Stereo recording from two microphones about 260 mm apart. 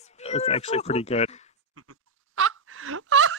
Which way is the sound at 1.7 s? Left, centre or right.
Right.